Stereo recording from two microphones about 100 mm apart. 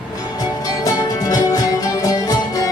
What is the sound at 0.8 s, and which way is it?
Music, 35° left (ahead or behind).